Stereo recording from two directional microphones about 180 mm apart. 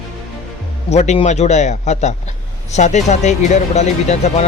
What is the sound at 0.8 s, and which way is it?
Speech, 40° left (ahead or behind).